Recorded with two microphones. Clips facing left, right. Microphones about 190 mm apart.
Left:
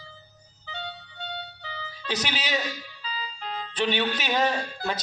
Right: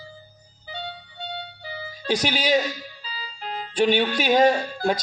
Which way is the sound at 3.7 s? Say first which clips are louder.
Right 6 dB; 10° right (ahead or behind).